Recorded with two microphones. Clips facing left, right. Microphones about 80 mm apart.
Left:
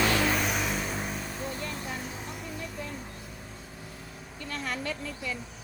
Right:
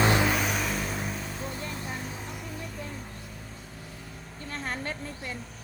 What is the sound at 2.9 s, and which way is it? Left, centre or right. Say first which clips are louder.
Vehicle: even; centre.